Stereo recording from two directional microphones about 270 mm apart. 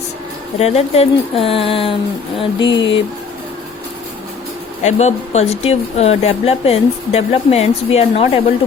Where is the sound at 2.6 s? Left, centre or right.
Left.